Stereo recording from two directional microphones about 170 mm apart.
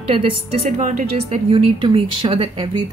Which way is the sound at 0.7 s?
50° right (ahead or behind).